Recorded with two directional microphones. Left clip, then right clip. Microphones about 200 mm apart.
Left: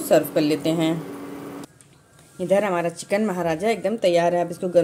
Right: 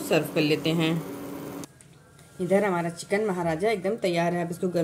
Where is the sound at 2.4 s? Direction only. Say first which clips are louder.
Left 4 dB; 45° left (ahead or behind).